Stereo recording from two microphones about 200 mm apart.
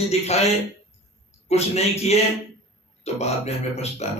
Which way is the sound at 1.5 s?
30° left (ahead or behind).